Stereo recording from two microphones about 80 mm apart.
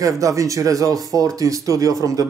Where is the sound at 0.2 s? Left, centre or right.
Right.